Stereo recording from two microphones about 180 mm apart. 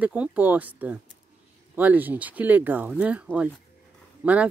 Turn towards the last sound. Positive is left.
turn(degrees=-5)  # may be behind; listen again after turning